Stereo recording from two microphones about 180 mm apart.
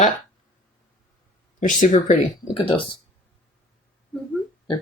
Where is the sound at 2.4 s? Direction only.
25° left (ahead or behind).